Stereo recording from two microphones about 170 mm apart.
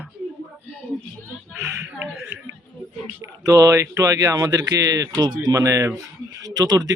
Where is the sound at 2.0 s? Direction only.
5° right (ahead or behind).